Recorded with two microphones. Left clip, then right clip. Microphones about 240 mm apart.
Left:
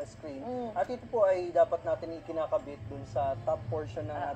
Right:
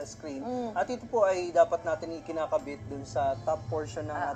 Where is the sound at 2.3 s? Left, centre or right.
Right.